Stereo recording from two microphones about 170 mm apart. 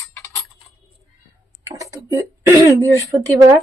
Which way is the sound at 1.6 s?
20° right (ahead or behind).